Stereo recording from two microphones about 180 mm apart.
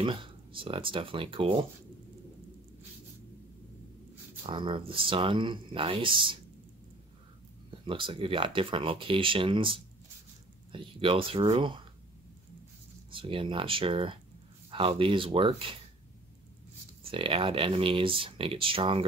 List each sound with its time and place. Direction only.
0.0 s speech: 30° right (ahead or behind)
4.4 s speech: 30° right (ahead or behind)
7.8 s speech: 30° right (ahead or behind)
13.1 s speech: 30° right (ahead or behind)
17.0 s speech: 30° right (ahead or behind)